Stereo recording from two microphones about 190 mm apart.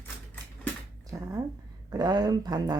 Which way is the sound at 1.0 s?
20° right (ahead or behind).